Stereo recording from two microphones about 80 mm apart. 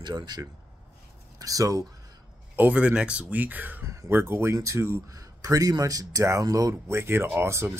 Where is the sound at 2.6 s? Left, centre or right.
Centre; by 5.0 s right.